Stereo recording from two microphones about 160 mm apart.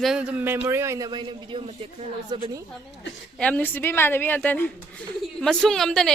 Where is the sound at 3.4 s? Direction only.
10° left (ahead or behind).